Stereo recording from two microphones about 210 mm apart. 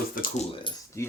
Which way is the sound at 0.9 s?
15° left (ahead or behind).